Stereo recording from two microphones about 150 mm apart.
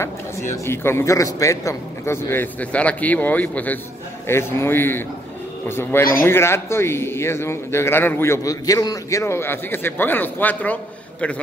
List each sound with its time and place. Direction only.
0.0 s a man's voice: 15° left (ahead or behind)